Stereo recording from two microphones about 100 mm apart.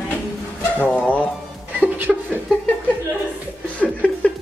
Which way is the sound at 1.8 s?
20° right (ahead or behind).